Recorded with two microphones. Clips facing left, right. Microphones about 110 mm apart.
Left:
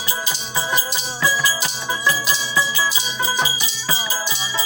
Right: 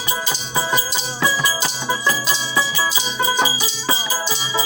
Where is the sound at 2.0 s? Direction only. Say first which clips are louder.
Even; 30° right (ahead or behind).